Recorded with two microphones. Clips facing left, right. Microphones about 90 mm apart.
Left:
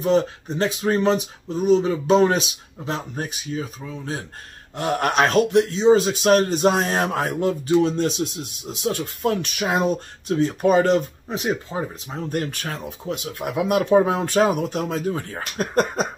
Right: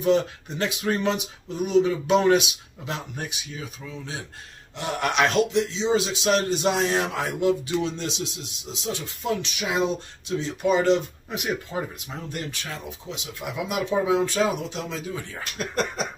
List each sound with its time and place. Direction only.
0.0 s speech: 35° left (ahead or behind)
11.2 s speech: 30° left (ahead or behind)
12.3 s speech: 50° left (ahead or behind)